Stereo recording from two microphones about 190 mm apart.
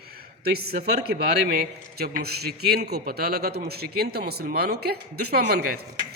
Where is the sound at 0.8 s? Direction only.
55° right (ahead or behind).